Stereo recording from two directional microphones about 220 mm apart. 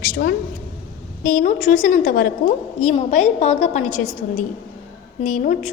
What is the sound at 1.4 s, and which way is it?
A woman's voice, 35° left (ahead or behind).